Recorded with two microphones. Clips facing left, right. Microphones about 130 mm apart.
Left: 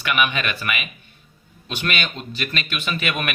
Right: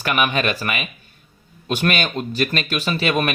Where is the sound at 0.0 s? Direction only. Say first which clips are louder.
Right 3 dB; 40° right (ahead or behind).